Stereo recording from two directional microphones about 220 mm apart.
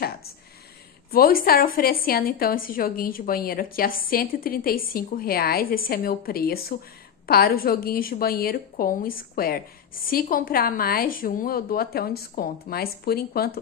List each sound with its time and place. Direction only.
1.1 s a woman's voice: 40° left (ahead or behind)